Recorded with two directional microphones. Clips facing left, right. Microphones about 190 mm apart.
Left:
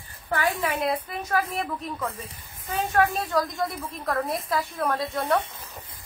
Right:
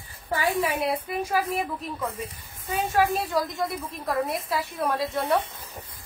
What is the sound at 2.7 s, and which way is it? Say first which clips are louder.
A woman's voice: even; 5° right (ahead or behind).